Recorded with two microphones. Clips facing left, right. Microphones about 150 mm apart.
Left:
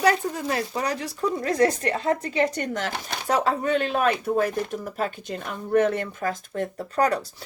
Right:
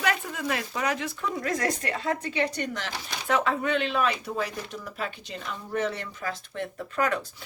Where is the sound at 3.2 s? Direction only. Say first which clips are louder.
Left 3 dB; 40° left (ahead or behind).